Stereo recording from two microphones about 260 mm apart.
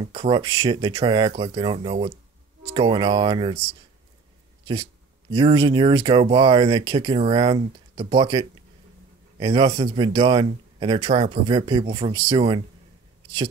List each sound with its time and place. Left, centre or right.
0.0 s speech: centre
5.3 s speech: centre